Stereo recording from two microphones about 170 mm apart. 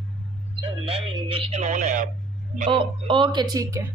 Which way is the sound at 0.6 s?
35° right (ahead or behind).